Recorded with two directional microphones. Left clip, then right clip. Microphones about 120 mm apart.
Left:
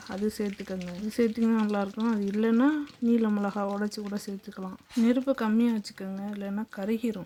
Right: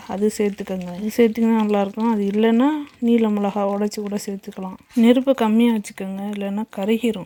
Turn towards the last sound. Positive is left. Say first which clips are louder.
# right 10 dB
turn(degrees=-20)  # may be behind; listen again after turning